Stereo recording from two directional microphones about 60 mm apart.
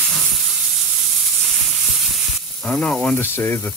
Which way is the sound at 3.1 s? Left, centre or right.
Left.